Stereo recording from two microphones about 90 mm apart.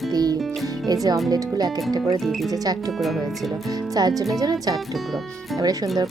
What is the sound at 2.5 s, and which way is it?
Speech, 45° right (ahead or behind).